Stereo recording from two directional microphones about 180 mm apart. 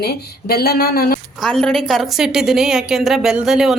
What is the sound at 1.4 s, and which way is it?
A woman's voice, 5° left (ahead or behind).